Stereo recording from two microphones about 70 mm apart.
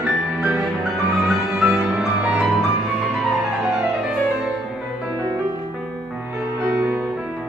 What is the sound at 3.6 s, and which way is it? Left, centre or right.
Music, centre.